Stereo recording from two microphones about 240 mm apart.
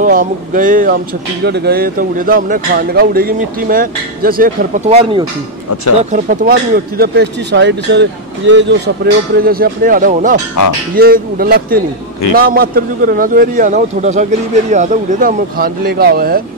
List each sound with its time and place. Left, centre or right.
0.0 s speech: right
7.0 s speech: right